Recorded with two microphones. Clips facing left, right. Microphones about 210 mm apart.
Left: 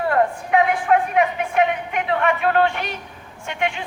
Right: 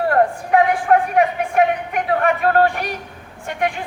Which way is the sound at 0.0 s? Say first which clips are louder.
Right 3 dB; 40° right (ahead or behind).